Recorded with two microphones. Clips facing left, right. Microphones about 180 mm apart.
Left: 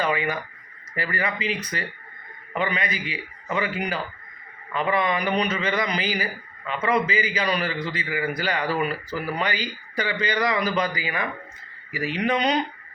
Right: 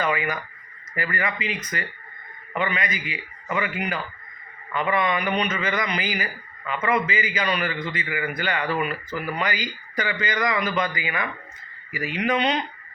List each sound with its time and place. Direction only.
0.0 s speech: 30° left (ahead or behind)